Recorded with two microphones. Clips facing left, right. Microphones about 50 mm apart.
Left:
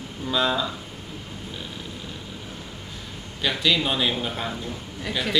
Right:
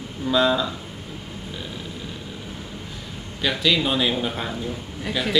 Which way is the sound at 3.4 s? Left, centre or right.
Centre.